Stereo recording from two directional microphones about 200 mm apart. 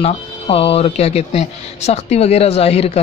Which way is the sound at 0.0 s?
30° left (ahead or behind).